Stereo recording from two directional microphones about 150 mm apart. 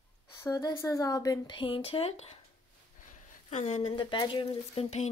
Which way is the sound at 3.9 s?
30° left (ahead or behind).